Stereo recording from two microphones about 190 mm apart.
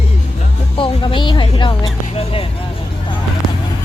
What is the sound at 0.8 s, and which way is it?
Speech, 25° left (ahead or behind).